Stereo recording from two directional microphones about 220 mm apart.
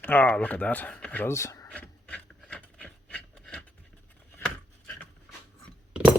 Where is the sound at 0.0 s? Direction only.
10° left (ahead or behind).